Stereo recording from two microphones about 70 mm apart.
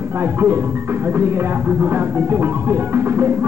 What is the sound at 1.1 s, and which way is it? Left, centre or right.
Music, right.